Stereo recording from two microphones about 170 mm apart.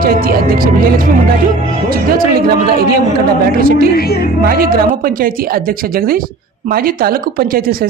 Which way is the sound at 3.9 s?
65° left (ahead or behind).